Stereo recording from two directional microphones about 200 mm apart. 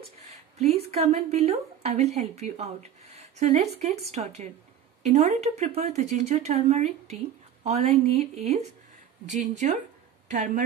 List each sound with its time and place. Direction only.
0.9 s a woman's voice: 30° right (ahead or behind)